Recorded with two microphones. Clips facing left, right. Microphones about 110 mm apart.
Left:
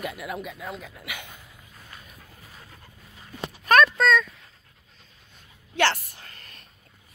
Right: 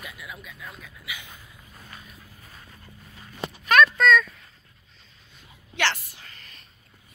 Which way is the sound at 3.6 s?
40° left (ahead or behind).